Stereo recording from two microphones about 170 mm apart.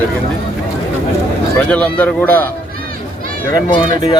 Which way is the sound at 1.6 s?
5° left (ahead or behind).